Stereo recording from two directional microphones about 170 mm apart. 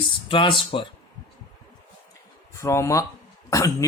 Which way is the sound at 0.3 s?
30° left (ahead or behind).